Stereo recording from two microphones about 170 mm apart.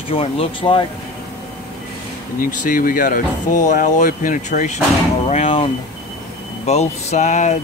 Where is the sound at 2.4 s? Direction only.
50° left (ahead or behind).